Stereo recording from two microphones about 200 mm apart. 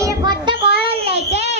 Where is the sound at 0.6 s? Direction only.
60° left (ahead or behind).